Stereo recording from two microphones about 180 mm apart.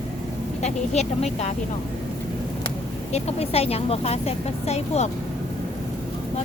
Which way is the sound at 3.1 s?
35° left (ahead or behind).